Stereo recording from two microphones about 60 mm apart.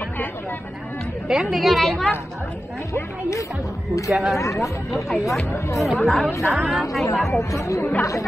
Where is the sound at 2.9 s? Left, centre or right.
Left.